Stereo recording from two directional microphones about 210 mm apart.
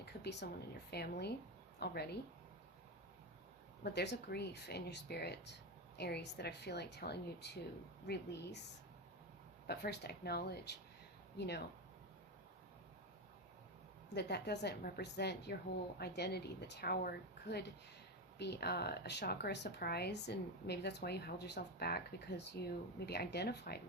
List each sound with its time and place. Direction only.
0.0 s speech: 55° left (ahead or behind)
3.8 s speech: 55° left (ahead or behind)
9.6 s speech: 50° left (ahead or behind)
14.1 s speech: 50° left (ahead or behind)